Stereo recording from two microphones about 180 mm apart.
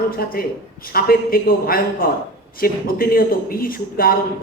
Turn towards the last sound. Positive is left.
turn(degrees=55)  # may be behind; listen again after turning